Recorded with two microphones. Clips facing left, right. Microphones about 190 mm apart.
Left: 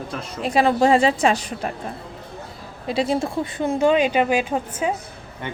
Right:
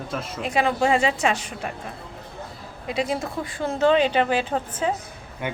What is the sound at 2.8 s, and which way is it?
Speech, 30° left (ahead or behind).